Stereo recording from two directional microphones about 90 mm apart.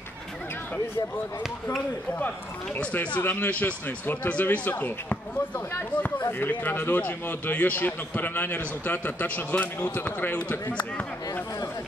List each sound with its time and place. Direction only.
2.8 s a man's voice: 15° left (ahead or behind)